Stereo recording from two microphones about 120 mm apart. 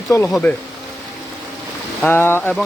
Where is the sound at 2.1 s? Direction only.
20° left (ahead or behind).